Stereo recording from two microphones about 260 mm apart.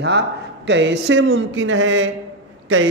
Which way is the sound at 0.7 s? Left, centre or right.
Right.